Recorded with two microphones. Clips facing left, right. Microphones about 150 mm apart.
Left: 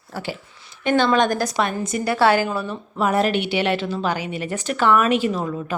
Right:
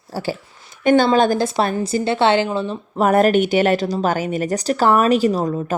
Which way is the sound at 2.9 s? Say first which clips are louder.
Right 5 dB; 45° right (ahead or behind).